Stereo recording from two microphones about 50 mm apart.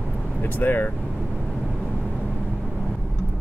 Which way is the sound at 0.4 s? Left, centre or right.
Left.